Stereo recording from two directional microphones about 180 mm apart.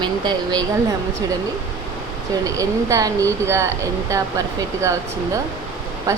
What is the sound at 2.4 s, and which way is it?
Speech, 20° right (ahead or behind).